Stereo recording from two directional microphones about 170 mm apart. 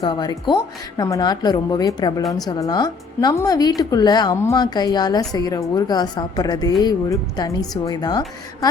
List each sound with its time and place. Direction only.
0.0 s a woman's voice: 25° left (ahead or behind)